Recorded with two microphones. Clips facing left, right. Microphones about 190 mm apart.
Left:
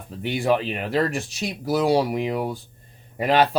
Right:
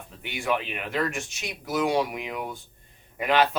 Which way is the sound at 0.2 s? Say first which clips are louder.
Left 7 dB; 35° left (ahead or behind).